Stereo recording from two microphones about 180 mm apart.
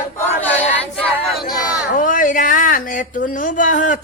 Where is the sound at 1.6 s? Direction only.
50° left (ahead or behind).